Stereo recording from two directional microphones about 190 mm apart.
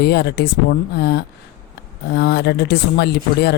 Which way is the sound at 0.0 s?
60° left (ahead or behind).